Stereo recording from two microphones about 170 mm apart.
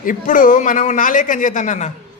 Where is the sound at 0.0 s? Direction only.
50° left (ahead or behind).